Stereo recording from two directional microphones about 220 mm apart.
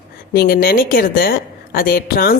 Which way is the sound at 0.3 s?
45° left (ahead or behind).